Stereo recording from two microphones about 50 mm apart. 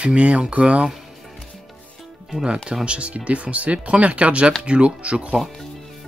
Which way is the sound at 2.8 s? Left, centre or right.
Right.